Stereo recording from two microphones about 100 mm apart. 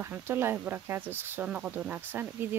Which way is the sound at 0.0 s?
25° right (ahead or behind).